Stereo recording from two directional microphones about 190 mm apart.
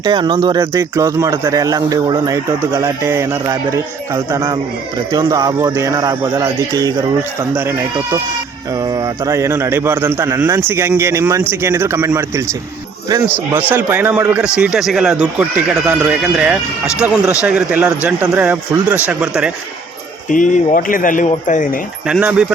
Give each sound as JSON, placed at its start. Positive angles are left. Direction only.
{"t": 0.0, "sound": "speech", "side_deg": -25}
{"t": 13.5, "sound": "speech", "side_deg": -10}
{"t": 20.3, "sound": "speech", "side_deg": 45}
{"t": 22.0, "sound": "speech", "side_deg": -5}